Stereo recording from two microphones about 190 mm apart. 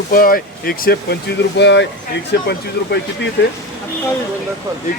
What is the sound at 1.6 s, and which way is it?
Speech, 70° left (ahead or behind).